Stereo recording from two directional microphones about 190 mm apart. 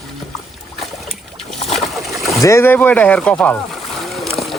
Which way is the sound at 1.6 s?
35° left (ahead or behind).